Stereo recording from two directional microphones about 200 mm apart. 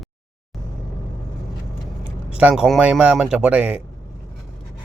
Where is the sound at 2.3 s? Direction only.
5° right (ahead or behind).